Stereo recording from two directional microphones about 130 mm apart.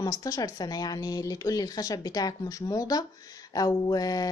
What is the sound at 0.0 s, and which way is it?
Speech, 25° left (ahead or behind).